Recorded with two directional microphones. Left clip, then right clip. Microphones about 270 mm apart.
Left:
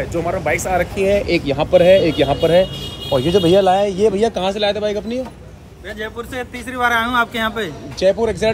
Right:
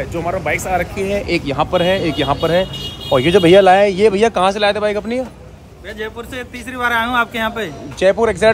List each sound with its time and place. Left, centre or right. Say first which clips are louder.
0.0 s speech: even; centre
3.1 s speech: right 4 dB; right
3.8 s speech: right 3 dB; centre
4.3 s speech: right 4 dB; centre